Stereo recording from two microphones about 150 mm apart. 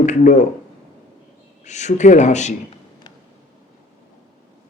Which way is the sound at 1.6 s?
50° left (ahead or behind).